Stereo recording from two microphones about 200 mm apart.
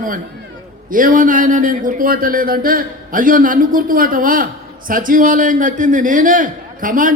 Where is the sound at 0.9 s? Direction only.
40° right (ahead or behind).